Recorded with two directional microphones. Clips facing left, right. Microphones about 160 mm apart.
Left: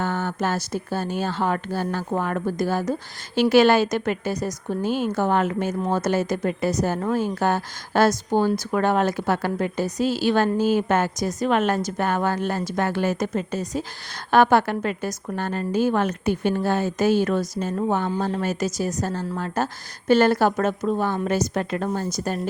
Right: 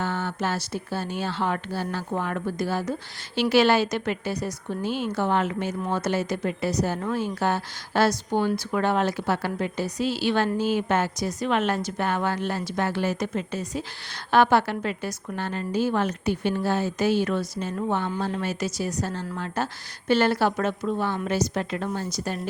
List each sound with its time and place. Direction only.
0.0 s a woman's voice: 45° left (ahead or behind)